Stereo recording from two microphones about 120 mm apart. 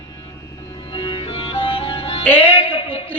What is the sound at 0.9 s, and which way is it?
Music, 45° left (ahead or behind).